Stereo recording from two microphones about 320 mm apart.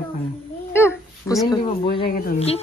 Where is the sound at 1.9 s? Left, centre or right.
Left.